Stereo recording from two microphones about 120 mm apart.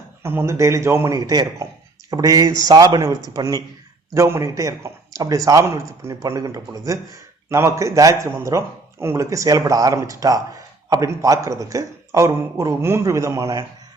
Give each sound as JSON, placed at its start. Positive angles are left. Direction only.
{"t": 0.2, "sound": "a man's voice", "side_deg": -20}
{"t": 1.3, "sound": "a man's voice", "side_deg": -35}